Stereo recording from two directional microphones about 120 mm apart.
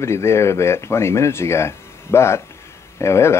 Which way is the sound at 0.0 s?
25° left (ahead or behind).